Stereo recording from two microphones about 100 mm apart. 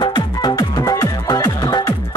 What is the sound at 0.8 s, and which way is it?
Music, 35° left (ahead or behind).